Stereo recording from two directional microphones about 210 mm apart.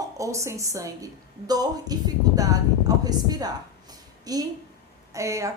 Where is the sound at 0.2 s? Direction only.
15° right (ahead or behind).